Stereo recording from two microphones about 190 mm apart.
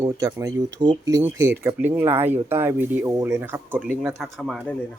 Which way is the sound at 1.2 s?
15° right (ahead or behind).